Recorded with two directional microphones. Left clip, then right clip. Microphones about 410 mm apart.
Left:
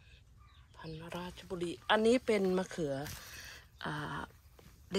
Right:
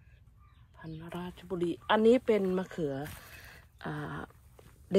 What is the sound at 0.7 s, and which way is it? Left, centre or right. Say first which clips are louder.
Speech: right 1 dB; centre.